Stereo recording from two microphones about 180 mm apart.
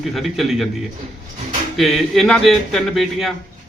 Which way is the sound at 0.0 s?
Centre (ahead or behind).